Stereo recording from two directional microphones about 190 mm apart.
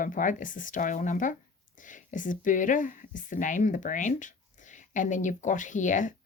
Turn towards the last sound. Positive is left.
turn(degrees=40)  # may be behind; listen again after turning